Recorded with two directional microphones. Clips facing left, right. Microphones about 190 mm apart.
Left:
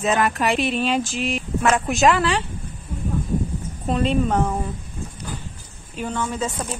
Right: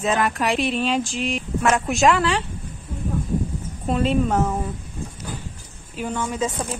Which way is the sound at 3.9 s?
5° right (ahead or behind).